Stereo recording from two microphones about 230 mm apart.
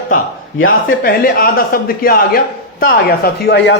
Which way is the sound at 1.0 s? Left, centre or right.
Left.